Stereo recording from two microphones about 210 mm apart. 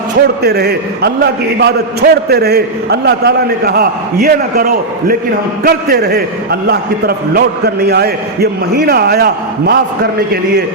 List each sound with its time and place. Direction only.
0.4 s a man's voice: 50° right (ahead or behind)